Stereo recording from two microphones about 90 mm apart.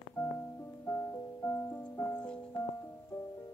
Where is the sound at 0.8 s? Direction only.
30° left (ahead or behind).